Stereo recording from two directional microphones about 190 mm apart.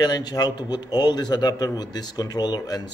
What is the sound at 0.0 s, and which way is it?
A man's voice, 20° left (ahead or behind).